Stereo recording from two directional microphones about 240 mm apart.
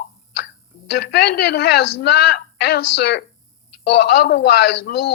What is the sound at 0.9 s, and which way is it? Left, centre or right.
Speech, left.